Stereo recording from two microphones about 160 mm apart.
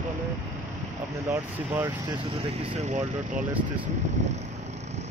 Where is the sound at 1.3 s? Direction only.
20° right (ahead or behind).